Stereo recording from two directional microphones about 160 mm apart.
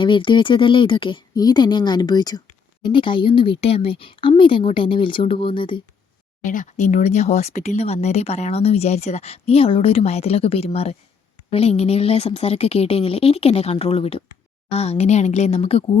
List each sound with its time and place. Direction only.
0.0 s speech: 30° left (ahead or behind)
6.4 s a woman's voice: 55° left (ahead or behind)